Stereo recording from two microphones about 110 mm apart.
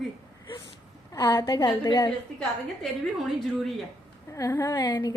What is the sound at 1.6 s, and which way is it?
Speech, 40° left (ahead or behind).